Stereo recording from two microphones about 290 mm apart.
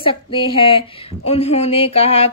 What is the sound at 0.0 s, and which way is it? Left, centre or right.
A woman's voice, centre.